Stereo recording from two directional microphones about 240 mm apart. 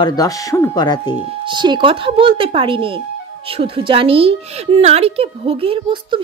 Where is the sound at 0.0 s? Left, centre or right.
Centre.